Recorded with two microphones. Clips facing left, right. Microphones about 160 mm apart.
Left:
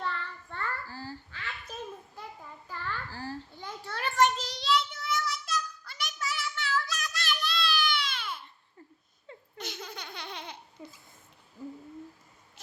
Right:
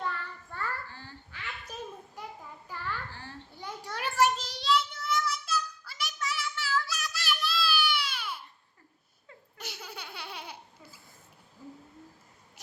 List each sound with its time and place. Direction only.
0.0 s child singing: 10° right (ahead or behind)
0.9 s babbling: 35° left (ahead or behind)
1.3 s quack: 10° right (ahead or behind)
2.7 s child singing: 15° right (ahead or behind)
3.1 s babbling: 35° left (ahead or behind)
3.5 s child singing: 15° right (ahead or behind)
9.6 s laughter: 10° right (ahead or behind)